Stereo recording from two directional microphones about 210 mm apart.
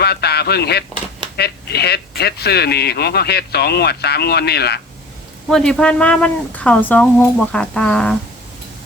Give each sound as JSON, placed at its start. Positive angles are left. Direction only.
{"t": 0.0, "sound": "a sound", "side_deg": 50}
{"t": 1.4, "sound": "speech", "side_deg": 50}
{"t": 5.5, "sound": "a woman's voice", "side_deg": 0}